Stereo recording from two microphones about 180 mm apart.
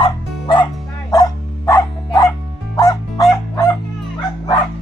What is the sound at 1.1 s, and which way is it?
Dog, 20° left (ahead or behind).